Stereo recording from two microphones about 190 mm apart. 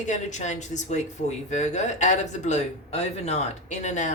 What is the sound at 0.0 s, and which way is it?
Speech, 40° left (ahead or behind).